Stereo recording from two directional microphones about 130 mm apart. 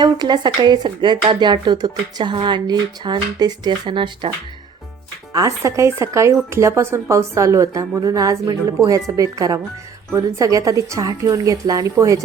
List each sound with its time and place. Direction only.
0.0 s speech: 35° right (ahead or behind)
5.3 s speech: 25° right (ahead or behind)